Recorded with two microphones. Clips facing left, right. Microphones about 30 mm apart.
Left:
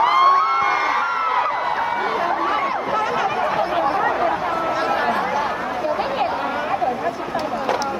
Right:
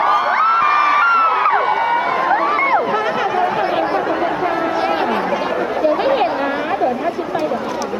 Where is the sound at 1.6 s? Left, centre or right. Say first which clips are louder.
Right 5 dB; right.